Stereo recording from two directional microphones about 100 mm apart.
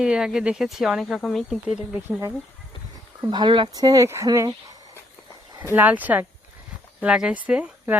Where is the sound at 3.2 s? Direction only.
50° right (ahead or behind).